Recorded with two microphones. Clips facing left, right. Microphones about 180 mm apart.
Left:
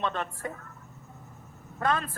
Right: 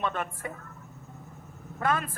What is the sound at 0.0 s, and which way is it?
Speech, 10° right (ahead or behind).